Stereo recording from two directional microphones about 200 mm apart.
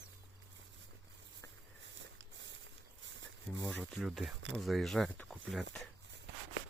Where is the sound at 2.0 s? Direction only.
65° right (ahead or behind).